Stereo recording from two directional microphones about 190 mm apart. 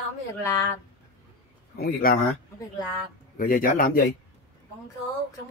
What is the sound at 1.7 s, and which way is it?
Speech, 55° left (ahead or behind).